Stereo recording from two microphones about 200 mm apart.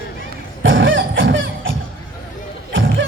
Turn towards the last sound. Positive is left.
turn(degrees=-70)  # may be behind; listen again after turning